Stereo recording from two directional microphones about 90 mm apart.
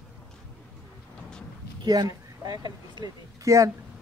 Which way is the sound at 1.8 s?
50° right (ahead or behind).